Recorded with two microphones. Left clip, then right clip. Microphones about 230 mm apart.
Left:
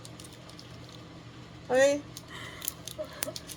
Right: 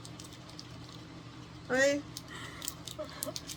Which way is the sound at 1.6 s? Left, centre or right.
Centre.